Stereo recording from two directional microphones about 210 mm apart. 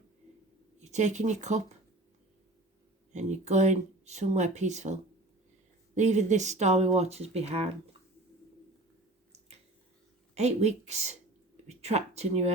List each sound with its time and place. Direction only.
0.8 s speech: 35° right (ahead or behind)
3.1 s speech: 35° right (ahead or behind)
10.3 s speech: 30° right (ahead or behind)